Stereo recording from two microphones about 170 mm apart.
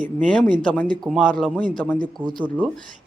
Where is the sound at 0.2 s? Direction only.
10° left (ahead or behind).